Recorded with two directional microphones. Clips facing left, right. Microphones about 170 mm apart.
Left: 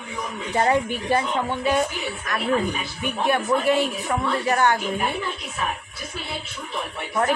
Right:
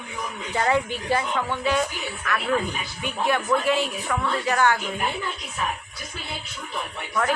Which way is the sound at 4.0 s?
20° left (ahead or behind).